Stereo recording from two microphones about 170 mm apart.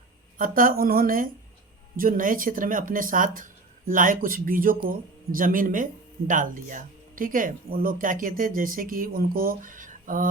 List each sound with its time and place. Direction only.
0.3 s a woman's voice: 55° right (ahead or behind)